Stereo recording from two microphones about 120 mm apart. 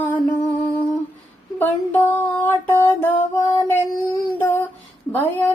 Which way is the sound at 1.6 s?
15° left (ahead or behind).